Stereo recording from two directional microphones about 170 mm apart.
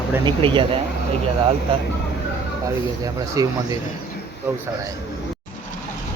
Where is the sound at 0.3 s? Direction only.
30° right (ahead or behind).